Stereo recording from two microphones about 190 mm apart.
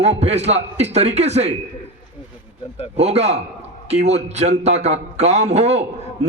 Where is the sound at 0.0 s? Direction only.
35° right (ahead or behind).